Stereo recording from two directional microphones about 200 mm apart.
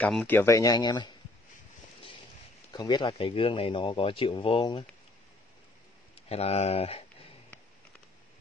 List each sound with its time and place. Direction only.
0.0 s speech: 5° left (ahead or behind); by 1.1 s 20° left (ahead or behind)
2.7 s speech: 20° left (ahead or behind)
6.1 s a sound: 30° left (ahead or behind)